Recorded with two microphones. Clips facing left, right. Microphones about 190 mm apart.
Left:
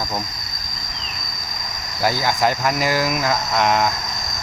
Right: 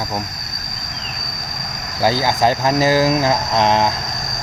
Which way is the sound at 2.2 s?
35° right (ahead or behind).